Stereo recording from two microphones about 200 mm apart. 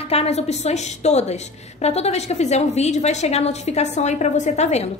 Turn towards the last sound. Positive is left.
turn(degrees=35)  # may be behind; listen again after turning